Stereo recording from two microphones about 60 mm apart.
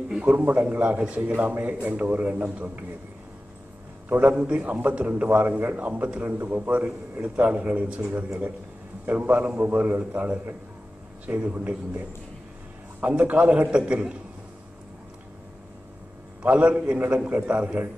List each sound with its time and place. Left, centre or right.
0.1 s a man's voice: centre
4.1 s a man's voice: right
6.2 s a man's voice: right
13.0 s a man's voice: right
16.4 s a man's voice: right